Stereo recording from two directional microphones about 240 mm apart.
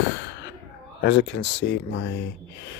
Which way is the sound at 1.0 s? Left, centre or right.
Left.